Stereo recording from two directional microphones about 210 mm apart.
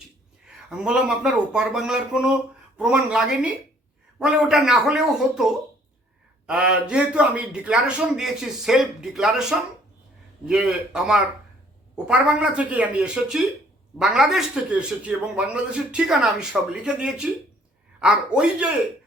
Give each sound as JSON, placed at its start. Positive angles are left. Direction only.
{"t": 0.4, "sound": "a man's voice", "side_deg": -5}